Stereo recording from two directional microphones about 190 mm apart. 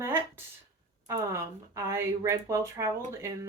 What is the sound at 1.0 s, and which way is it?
Speech, 15° right (ahead or behind).